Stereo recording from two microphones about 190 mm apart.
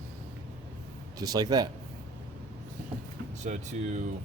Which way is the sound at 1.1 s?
20° right (ahead or behind).